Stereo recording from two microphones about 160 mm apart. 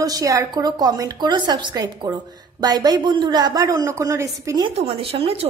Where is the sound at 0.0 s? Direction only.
20° right (ahead or behind).